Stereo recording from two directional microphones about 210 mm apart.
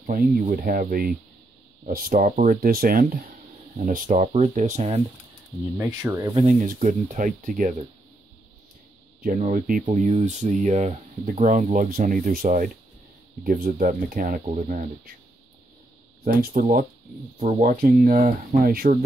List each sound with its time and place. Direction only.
0.0 s speech: 40° right (ahead or behind)
5.8 s speech: 15° right (ahead or behind)
6.4 s speech: 40° right (ahead or behind)
9.2 s speech: 40° right (ahead or behind)
16.3 s speech: 45° right (ahead or behind)